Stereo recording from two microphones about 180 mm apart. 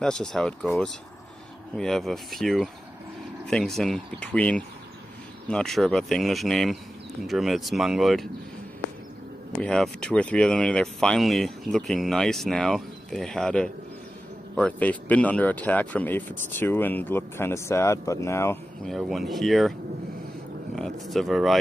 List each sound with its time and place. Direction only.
0.0 s speech: 5° left (ahead or behind)
9.6 s speech: 5° left (ahead or behind)
18.9 s speech: centre (ahead or behind)
20.7 s speech: centre (ahead or behind)